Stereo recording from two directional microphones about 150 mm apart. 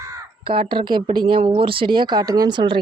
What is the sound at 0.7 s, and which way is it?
Speech, 30° right (ahead or behind).